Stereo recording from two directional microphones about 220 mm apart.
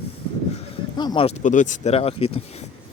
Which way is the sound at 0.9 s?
20° left (ahead or behind).